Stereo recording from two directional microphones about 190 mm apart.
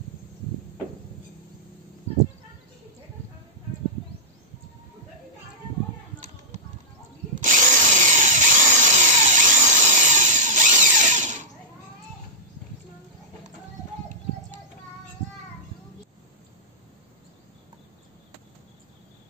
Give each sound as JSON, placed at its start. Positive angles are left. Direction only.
{"t": 7.3, "sound": "tools", "side_deg": -45}